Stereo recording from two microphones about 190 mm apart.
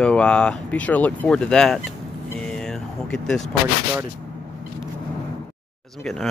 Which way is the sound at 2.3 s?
5° left (ahead or behind).